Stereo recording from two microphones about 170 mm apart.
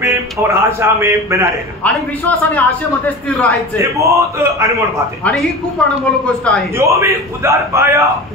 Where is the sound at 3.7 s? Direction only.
20° right (ahead or behind).